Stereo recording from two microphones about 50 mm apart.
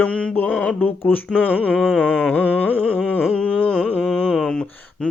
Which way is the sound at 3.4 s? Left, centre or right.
Left.